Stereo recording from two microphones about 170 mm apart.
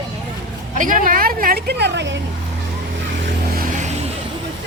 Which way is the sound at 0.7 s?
50° right (ahead or behind).